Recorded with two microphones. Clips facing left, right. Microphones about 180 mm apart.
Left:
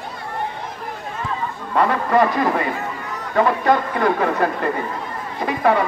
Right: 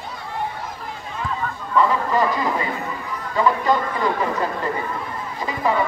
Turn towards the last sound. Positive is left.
turn(degrees=65)  # may be behind; listen again after turning